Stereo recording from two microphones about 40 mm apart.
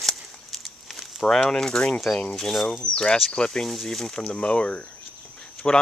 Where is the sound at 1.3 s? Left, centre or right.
Centre.